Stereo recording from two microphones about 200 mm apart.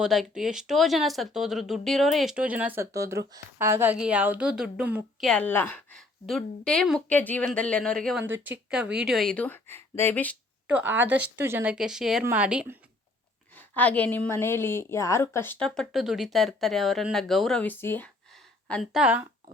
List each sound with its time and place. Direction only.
0.0 s a woman's voice: centre (ahead or behind)
5.3 s a woman's voice: 10° left (ahead or behind)
8.2 s a woman's voice: 10° right (ahead or behind); by 10.3 s 10° left (ahead or behind)
10.7 s a woman's voice: 10° right (ahead or behind)
13.6 s a woman's voice: 10° left (ahead or behind)
18.7 s a woman's voice: centre (ahead or behind)